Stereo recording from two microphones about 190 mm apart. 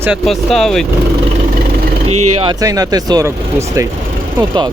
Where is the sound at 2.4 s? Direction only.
20° right (ahead or behind).